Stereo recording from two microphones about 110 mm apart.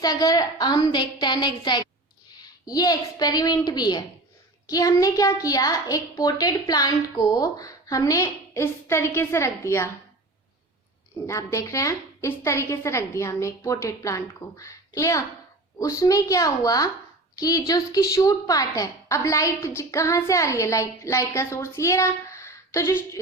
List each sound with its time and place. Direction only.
0.0 s a woman's voice: 35° left (ahead or behind)
11.3 s a woman's voice: 30° left (ahead or behind)